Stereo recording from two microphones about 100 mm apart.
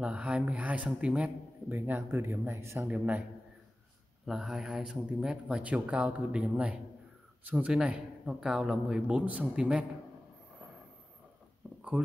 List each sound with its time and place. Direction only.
0.0 s speech: 15° right (ahead or behind)
2.9 s speech: 15° right (ahead or behind)
4.3 s speech: 5° right (ahead or behind)
11.6 s a sound: 10° right (ahead or behind)